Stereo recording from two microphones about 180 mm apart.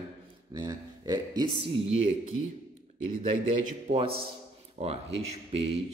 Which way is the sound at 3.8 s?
30° right (ahead or behind).